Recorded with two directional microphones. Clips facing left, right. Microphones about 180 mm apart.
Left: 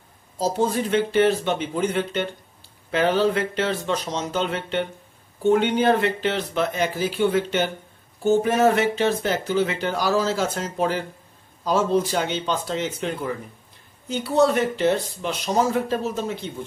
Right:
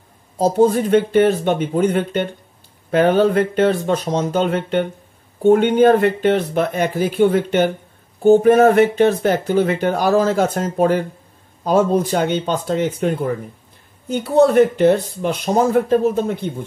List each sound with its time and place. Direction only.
0.4 s speech: 50° right (ahead or behind)